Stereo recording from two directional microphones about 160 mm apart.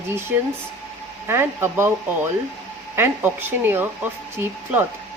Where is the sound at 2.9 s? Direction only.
15° right (ahead or behind).